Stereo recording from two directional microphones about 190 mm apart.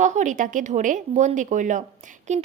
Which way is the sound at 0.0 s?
40° right (ahead or behind).